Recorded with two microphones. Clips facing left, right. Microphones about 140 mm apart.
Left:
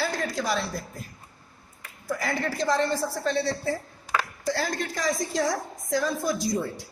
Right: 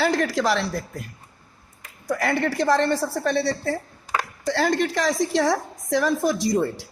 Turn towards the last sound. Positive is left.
turn(degrees=-80)